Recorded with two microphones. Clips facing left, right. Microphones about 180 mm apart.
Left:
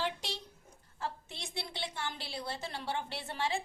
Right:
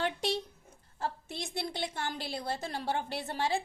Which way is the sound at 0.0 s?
55° right (ahead or behind).